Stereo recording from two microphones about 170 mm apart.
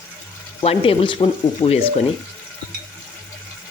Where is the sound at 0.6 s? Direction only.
35° left (ahead or behind).